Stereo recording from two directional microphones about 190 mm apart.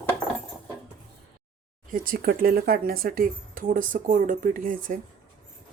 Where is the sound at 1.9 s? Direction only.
50° right (ahead or behind).